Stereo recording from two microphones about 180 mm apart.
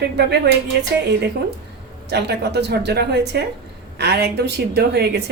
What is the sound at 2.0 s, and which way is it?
A woman's voice, 70° right (ahead or behind).